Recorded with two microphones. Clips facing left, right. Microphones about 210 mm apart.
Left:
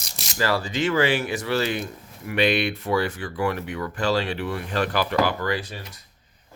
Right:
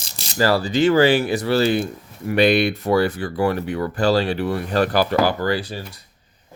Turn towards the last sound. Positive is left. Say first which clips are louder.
# right 5 dB
turn(degrees=-35)  # may be behind; listen again after turning